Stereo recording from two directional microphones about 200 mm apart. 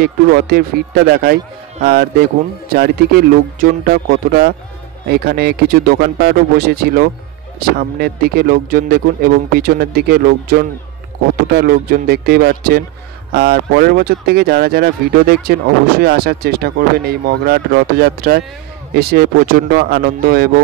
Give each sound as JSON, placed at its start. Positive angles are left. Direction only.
{"t": 0.0, "sound": "speech", "side_deg": -50}
{"t": 12.1, "sound": "speech", "side_deg": -50}